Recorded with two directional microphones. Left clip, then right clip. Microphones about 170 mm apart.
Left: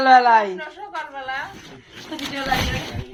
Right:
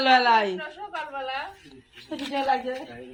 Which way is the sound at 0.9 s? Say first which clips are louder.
Left 3 dB; 5° right (ahead or behind).